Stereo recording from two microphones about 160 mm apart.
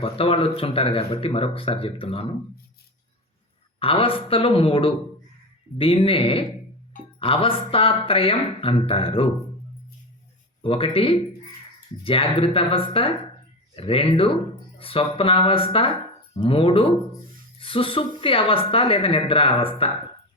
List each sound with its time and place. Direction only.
0.0 s speech: 35° left (ahead or behind)
3.8 s speech: 35° left (ahead or behind)
10.6 s speech: 35° left (ahead or behind)